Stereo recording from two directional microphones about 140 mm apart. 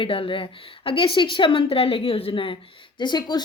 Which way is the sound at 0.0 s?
40° left (ahead or behind).